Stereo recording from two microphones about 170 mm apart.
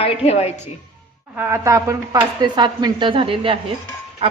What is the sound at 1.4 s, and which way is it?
A woman's voice, 15° right (ahead or behind).